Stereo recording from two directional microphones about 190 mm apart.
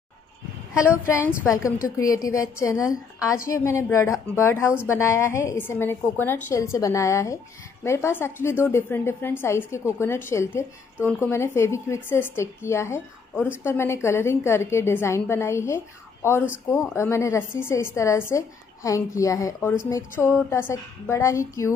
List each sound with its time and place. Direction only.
0.8 s speech: 10° left (ahead or behind)